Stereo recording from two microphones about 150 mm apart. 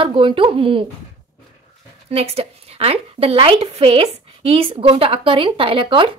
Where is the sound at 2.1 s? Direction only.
40° right (ahead or behind).